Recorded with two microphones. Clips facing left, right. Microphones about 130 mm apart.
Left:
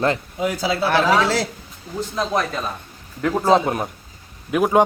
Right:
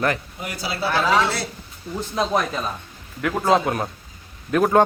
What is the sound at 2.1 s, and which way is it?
Speech, 5° right (ahead or behind).